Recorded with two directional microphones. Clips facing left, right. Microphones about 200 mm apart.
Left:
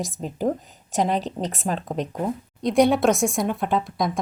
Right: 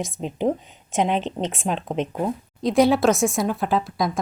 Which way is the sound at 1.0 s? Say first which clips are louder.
Right 1 dB; 40° left (ahead or behind).